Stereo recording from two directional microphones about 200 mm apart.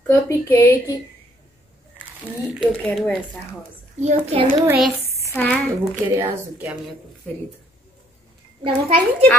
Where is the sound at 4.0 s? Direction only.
30° right (ahead or behind).